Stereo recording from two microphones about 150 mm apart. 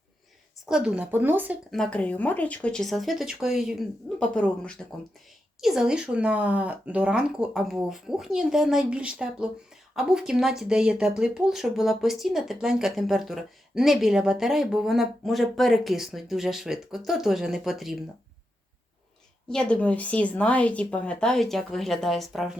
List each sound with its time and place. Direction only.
0.6 s speech: 5° right (ahead or behind)
1.7 s speech: 5° left (ahead or behind)
5.5 s speech: 5° right (ahead or behind)
19.5 s speech: 5° left (ahead or behind)